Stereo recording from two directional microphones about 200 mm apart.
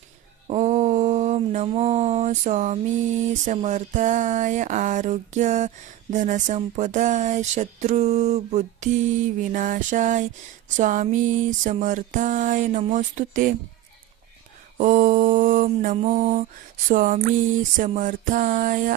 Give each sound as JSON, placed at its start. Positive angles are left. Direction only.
{"t": 0.4, "sound": "a sound", "side_deg": -35}
{"t": 3.4, "sound": "speech", "side_deg": -35}
{"t": 14.8, "sound": "speech", "side_deg": -40}